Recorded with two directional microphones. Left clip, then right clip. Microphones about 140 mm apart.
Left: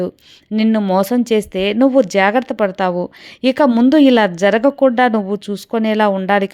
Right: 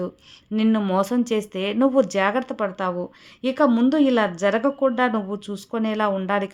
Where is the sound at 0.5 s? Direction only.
45° left (ahead or behind).